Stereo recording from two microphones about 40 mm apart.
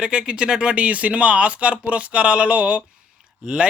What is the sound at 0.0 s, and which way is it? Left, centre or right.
Speech, right.